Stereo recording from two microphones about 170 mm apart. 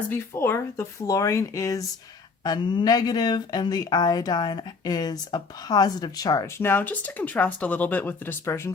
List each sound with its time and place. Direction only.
0.1 s speech: 15° left (ahead or behind)